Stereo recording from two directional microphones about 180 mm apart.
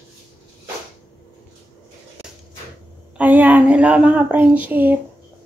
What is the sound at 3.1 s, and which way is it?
Speech, 10° right (ahead or behind).